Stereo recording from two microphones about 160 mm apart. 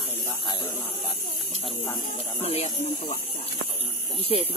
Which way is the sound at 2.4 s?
45° left (ahead or behind).